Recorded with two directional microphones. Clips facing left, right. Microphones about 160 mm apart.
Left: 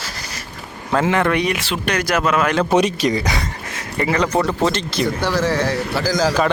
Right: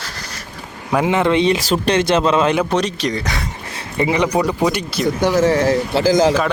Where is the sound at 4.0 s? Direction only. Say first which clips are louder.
Right 2 dB; 15° right (ahead or behind).